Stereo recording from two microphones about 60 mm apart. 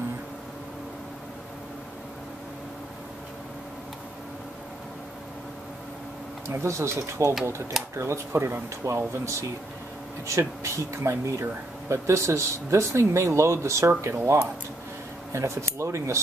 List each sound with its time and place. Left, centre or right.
6.4 s speech: right
8.8 s speech: right